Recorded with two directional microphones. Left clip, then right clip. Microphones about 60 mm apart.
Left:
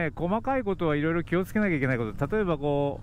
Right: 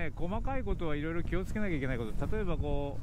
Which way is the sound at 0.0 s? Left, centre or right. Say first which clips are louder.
Left 10 dB; left.